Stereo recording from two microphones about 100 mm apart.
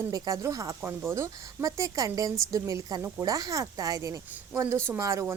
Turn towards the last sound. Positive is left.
turn(degrees=-30)  # may be behind; listen again after turning